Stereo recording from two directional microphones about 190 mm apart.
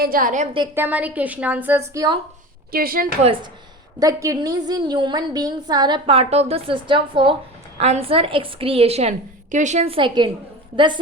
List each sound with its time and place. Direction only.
0.0 s a woman's voice: 50° right (ahead or behind)
0.8 s a woman's voice: 10° right (ahead or behind)
2.7 s a woman's voice: 50° right (ahead or behind)
4.0 s a woman's voice: 15° right (ahead or behind)